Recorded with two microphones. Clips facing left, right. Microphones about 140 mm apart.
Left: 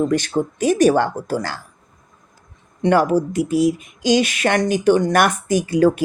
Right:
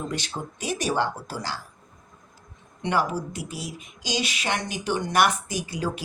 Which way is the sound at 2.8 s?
50° left (ahead or behind).